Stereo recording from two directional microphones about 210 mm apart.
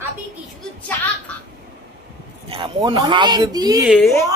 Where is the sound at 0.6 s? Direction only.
5° left (ahead or behind).